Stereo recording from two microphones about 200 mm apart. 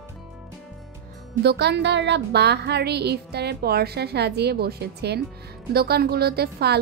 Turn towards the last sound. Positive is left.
turn(degrees=-55)  # may be behind; listen again after turning